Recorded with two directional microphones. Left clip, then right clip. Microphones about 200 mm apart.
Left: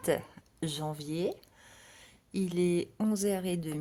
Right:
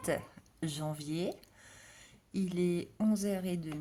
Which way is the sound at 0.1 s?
25° left (ahead or behind).